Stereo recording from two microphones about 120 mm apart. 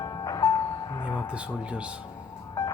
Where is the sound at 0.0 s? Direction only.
30° left (ahead or behind).